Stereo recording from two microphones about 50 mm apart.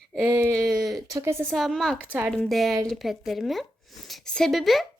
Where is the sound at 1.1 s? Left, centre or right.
Right.